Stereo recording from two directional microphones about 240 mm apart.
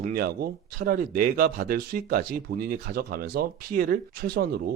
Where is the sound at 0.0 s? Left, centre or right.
Right.